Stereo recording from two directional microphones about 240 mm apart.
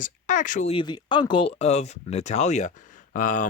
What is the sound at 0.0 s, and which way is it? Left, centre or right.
Speech, left.